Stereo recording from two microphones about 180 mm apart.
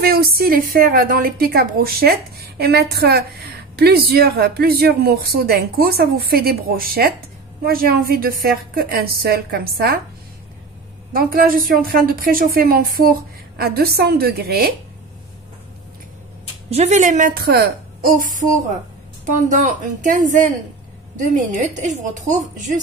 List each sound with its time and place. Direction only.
0.0 s a woman's voice: 55° right (ahead or behind)
11.1 s a woman's voice: 55° right (ahead or behind)
16.7 s a woman's voice: 40° right (ahead or behind)